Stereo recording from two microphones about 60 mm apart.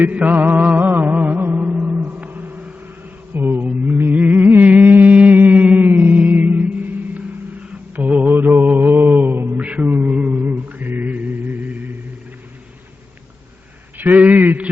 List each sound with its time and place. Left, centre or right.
0.1 s music: right
7.6 s mantra: right
14.0 s a sound: right